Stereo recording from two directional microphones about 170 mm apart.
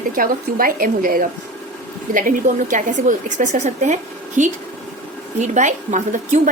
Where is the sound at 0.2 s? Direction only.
55° right (ahead or behind).